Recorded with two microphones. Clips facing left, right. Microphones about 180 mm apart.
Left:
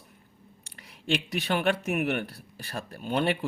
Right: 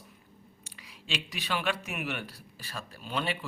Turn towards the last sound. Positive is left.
turn(degrees=60)  # may be behind; listen again after turning